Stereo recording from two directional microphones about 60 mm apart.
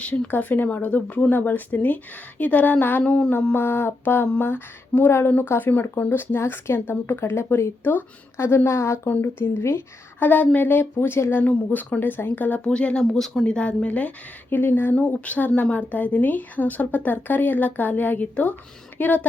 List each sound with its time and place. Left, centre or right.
0.0 s speech: left
0.3 s speech: left
3.5 s speech: left
9.0 s speech: left
10.2 s speech: left
11.4 s speech: left
12.6 s speech: centre
13.4 s speech: centre
14.5 s speech: left
14.9 s speech: left